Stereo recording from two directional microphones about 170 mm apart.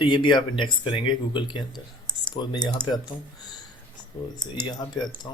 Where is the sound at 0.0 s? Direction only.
25° left (ahead or behind).